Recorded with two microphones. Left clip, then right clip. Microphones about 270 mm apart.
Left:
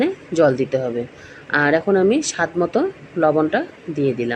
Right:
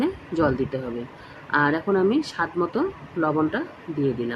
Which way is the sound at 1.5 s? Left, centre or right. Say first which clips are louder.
Left 5 dB; centre.